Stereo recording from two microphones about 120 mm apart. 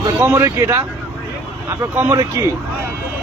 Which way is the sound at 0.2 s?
25° right (ahead or behind).